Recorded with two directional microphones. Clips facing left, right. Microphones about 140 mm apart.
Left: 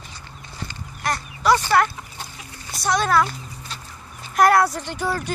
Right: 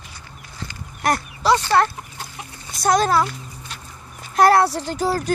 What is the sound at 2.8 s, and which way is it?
Speech, 50° right (ahead or behind).